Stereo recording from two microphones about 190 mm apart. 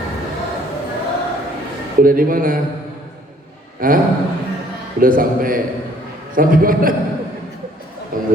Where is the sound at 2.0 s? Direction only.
45° right (ahead or behind).